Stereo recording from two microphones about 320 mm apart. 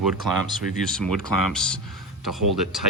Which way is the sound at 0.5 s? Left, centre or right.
Centre.